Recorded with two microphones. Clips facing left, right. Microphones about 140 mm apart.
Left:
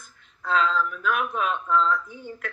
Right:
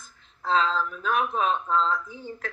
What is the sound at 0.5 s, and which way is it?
Speech, 30° right (ahead or behind).